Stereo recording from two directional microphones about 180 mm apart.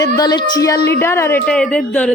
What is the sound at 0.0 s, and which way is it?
A woman's voice, 20° left (ahead or behind).